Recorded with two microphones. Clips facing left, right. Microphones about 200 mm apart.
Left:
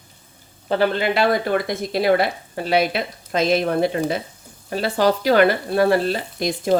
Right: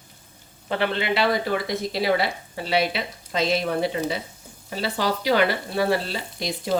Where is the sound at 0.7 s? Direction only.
40° left (ahead or behind).